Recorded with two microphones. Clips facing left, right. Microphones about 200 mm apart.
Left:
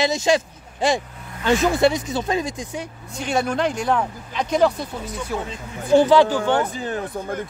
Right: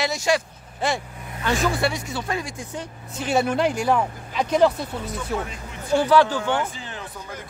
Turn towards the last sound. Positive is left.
turn(degrees=55)  # may be behind; listen again after turning